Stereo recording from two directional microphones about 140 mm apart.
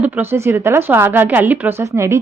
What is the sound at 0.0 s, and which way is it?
A woman's voice, 15° right (ahead or behind).